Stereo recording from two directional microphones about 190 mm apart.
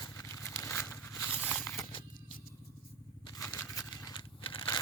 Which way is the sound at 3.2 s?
20° left (ahead or behind).